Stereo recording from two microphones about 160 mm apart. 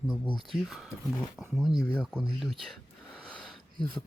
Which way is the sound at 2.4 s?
Centre (ahead or behind).